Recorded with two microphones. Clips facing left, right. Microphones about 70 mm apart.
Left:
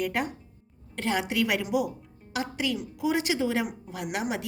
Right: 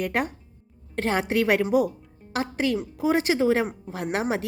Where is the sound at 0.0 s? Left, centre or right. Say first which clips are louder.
Right 3 dB; right.